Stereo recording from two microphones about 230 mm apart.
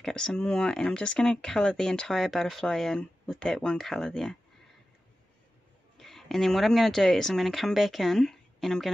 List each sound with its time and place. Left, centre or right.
0.0 s speech: centre
5.9 s speech: centre